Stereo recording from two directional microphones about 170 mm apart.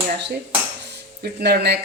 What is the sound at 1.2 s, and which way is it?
Speech, 65° right (ahead or behind).